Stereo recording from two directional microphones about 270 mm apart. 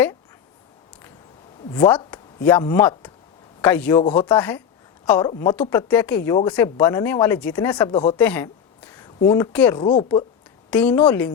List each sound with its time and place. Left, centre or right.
1.7 s a woman's voice: centre
9.8 s speech: centre
10.7 s a woman's voice: centre